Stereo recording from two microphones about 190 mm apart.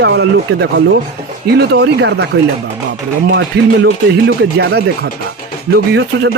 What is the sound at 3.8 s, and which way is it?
Speech, 60° right (ahead or behind).